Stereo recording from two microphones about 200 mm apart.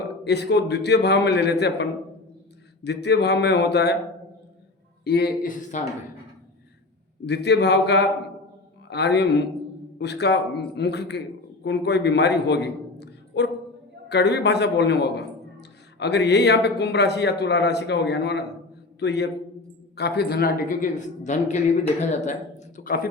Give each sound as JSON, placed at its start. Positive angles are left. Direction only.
{"t": 0.3, "sound": "speech", "side_deg": 55}
{"t": 5.0, "sound": "a man's voice", "side_deg": 50}
{"t": 7.3, "sound": "a man's voice", "side_deg": 55}